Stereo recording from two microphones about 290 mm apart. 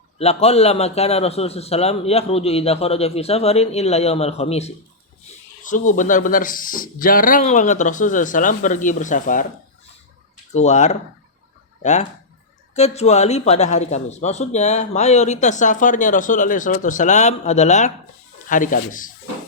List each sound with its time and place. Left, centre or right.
0.2 s speech: left
10.5 s speech: left